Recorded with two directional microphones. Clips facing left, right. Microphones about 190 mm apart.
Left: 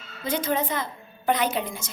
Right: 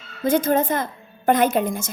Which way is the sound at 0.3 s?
50° right (ahead or behind).